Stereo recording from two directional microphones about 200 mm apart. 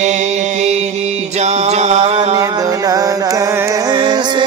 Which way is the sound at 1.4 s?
35° right (ahead or behind).